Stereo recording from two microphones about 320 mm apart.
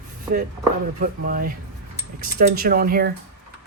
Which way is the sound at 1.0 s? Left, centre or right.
Right.